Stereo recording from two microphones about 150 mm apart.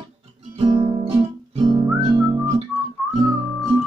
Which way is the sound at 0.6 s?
35° right (ahead or behind).